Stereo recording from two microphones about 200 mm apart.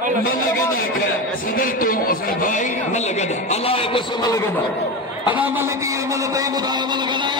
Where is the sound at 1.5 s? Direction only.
45° left (ahead or behind); by 4.4 s 20° left (ahead or behind).